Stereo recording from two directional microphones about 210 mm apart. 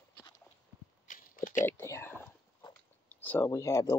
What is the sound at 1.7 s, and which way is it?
Whispering, 10° left (ahead or behind).